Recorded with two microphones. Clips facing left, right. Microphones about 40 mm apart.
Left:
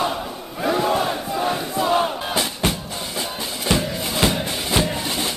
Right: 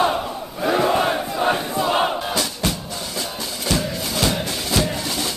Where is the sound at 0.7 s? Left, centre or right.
Centre.